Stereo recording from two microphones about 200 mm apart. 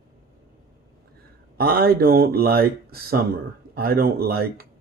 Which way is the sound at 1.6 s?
50° right (ahead or behind).